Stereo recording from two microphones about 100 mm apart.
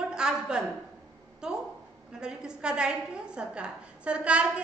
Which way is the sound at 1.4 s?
5° right (ahead or behind).